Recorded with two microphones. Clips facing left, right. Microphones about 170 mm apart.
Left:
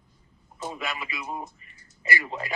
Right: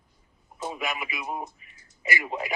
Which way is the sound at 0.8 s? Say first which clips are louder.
Right 2 dB; 15° right (ahead or behind).